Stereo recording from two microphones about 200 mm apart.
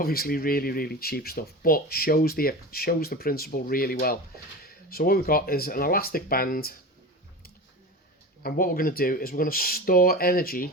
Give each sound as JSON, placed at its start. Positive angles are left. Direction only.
{"t": 0.0, "sound": "speech", "side_deg": 50}
{"t": 8.4, "sound": "speech", "side_deg": 45}